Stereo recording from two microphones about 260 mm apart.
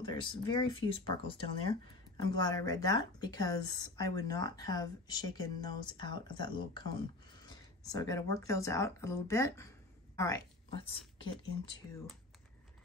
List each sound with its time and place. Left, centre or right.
0.0 s speech: centre